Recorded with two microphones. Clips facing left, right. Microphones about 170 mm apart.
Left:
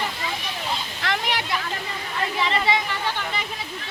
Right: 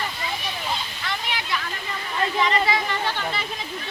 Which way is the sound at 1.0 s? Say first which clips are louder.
Left 7 dB; 90° left.